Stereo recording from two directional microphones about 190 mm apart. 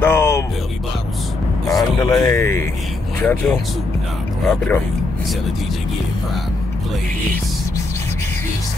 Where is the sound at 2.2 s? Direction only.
15° left (ahead or behind).